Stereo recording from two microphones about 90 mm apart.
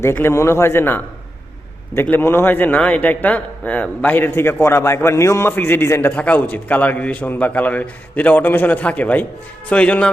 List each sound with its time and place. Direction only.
0.0 s a man's voice: 25° left (ahead or behind)